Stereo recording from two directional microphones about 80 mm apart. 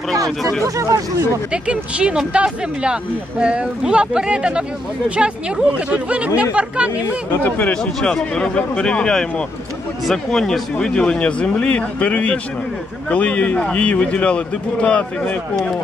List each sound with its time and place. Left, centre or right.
0.4 s speech: centre
0.7 s speech: right
1.5 s speech: centre
7.3 s speech: left
7.7 s speech: centre